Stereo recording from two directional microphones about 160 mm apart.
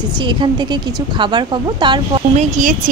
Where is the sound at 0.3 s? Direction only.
30° right (ahead or behind).